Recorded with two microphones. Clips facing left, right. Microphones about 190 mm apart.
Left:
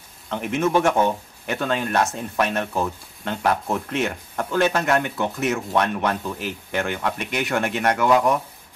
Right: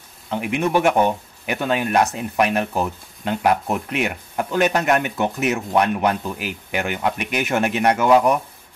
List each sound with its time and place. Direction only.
0.3 s speech: 10° right (ahead or behind)